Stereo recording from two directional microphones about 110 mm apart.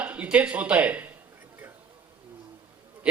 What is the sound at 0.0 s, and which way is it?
Speech, 15° right (ahead or behind).